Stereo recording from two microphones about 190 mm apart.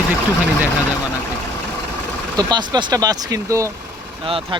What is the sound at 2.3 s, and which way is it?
Speech, 20° right (ahead or behind).